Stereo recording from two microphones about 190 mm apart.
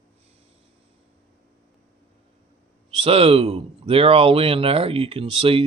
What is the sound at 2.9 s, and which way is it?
Speech, 30° right (ahead or behind).